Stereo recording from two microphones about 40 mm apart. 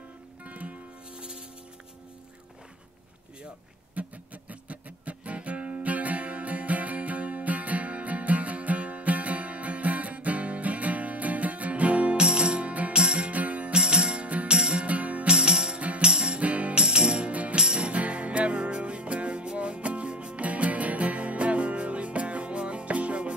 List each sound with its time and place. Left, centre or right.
0.4 s music: right
1.1 s music: right
3.9 s music: right
12.2 s music: right
13.3 s music: right
13.7 s music: right
14.9 s music: right
15.2 s music: right
16.3 s music: right
16.7 s music: centre
17.3 s music: right
17.6 s music: right